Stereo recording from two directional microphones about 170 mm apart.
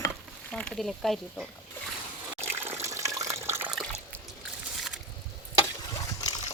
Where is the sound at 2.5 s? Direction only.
15° right (ahead or behind).